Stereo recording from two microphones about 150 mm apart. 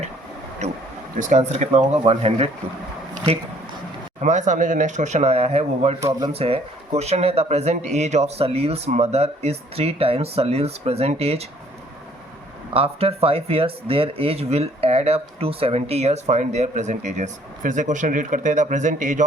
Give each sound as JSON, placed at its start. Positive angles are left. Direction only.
{"t": 1.2, "sound": "speech", "side_deg": -50}
{"t": 4.2, "sound": "speech", "side_deg": -55}
{"t": 12.7, "sound": "speech", "side_deg": -40}